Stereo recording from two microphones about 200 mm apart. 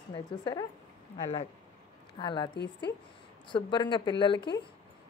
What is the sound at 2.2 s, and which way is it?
Speech, 25° left (ahead or behind).